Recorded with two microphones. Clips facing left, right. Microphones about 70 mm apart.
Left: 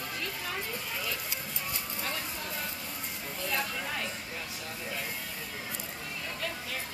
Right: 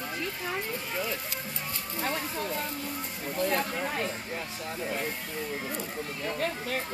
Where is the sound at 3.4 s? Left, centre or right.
Right.